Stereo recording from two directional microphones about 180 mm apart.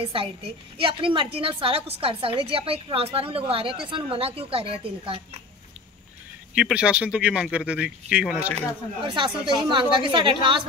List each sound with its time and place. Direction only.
0.0 s a woman's voice: 30° right (ahead or behind)
6.5 s speech: 5° right (ahead or behind)
9.0 s a woman's voice: 25° right (ahead or behind)